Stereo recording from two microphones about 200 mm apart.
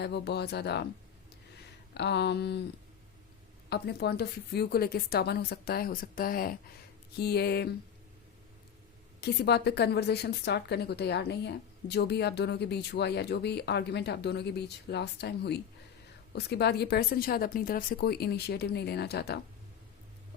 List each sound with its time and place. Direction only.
0.0 s a woman's voice: 55° left (ahead or behind)
1.9 s a woman's voice: 55° left (ahead or behind)
3.7 s a woman's voice: 55° left (ahead or behind)
9.2 s a woman's voice: 55° left (ahead or behind)